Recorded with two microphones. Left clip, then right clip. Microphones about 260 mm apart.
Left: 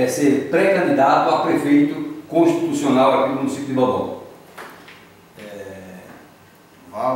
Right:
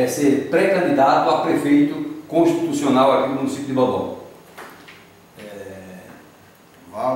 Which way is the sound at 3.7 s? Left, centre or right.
Left.